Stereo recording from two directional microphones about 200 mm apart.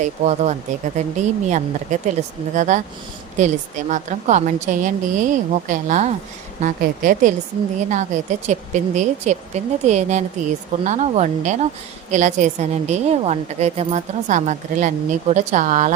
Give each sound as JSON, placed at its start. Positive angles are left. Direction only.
{"t": 0.0, "sound": "a woman's voice", "side_deg": -35}